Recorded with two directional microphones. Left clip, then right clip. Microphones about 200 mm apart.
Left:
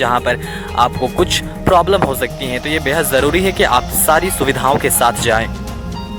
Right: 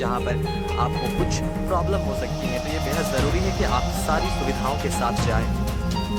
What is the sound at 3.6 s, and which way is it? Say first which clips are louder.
Speech: left 10 dB; 40° left (ahead or behind).